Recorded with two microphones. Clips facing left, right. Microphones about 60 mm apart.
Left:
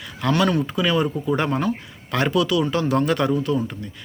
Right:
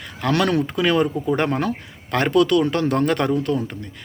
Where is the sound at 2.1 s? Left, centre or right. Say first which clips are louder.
Right 3 dB; right.